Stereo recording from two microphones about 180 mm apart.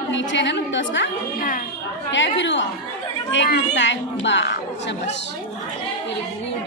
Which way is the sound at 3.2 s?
80° left.